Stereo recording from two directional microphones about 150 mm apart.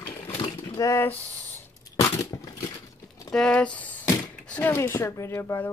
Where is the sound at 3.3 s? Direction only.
5° left (ahead or behind).